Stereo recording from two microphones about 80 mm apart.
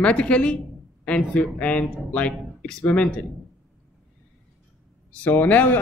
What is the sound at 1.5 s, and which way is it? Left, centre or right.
A man's voice, centre.